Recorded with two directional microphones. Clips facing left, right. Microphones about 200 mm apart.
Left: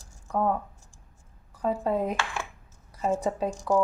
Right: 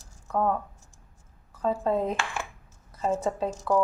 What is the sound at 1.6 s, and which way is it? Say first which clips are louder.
A woman's voice: right 1 dB; 10° left (ahead or behind).